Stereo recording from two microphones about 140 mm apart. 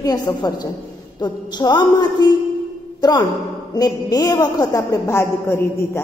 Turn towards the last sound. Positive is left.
turn(degrees=20)  # may be behind; listen again after turning